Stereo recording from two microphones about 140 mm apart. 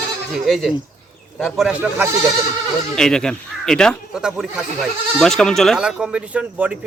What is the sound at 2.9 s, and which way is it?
Speech, 5° left (ahead or behind).